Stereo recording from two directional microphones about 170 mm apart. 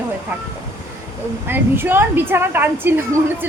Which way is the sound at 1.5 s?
15° right (ahead or behind).